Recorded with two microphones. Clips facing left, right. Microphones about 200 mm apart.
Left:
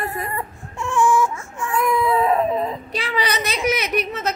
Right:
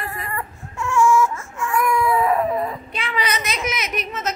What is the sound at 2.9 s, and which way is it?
A child's voice, 35° left (ahead or behind).